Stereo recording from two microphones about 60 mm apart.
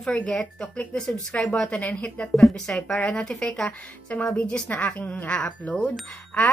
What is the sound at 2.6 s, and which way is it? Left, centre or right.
Speech, centre.